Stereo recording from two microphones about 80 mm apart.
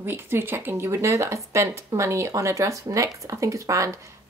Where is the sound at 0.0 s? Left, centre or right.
Right.